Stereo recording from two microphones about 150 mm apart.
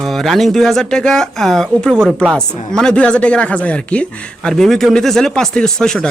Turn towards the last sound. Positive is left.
turn(degrees=5)  # may be behind; listen again after turning